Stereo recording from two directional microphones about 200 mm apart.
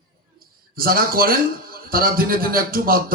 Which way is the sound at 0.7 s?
45° right (ahead or behind).